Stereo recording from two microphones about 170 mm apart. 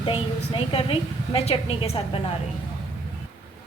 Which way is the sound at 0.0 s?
30° left (ahead or behind).